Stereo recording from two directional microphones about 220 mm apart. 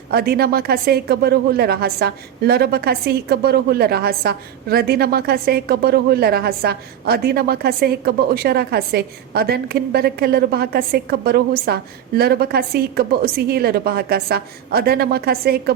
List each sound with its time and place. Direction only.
0.1 s a woman's voice: 45° right (ahead or behind)